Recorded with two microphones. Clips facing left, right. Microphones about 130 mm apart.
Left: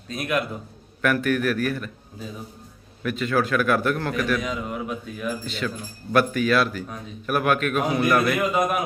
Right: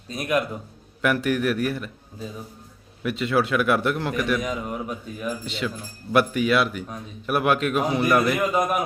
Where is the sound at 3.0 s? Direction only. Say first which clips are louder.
Right 1 dB; 25° right (ahead or behind).